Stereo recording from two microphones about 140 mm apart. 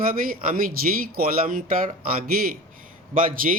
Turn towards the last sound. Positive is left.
turn(degrees=-80)